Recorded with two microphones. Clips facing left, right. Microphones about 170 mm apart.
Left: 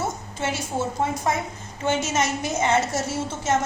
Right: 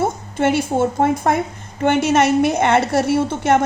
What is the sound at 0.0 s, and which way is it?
A woman's voice, 55° right (ahead or behind).